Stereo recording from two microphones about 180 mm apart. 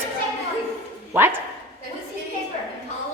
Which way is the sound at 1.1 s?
15° right (ahead or behind).